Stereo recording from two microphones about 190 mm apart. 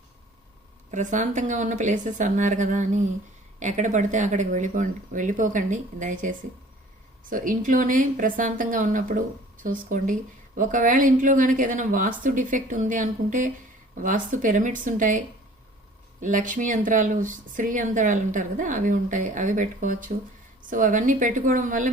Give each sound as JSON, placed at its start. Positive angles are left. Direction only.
{"t": 0.9, "sound": "speech", "side_deg": -40}
{"t": 16.2, "sound": "speech", "side_deg": -45}